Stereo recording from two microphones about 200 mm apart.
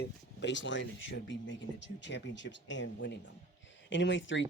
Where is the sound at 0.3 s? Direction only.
65° left (ahead or behind).